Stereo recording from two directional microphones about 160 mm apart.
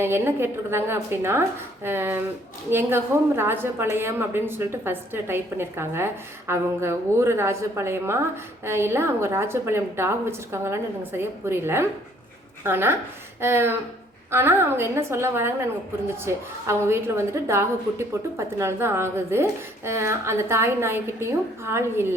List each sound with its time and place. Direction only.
0.0 s a woman's voice: 15° right (ahead or behind)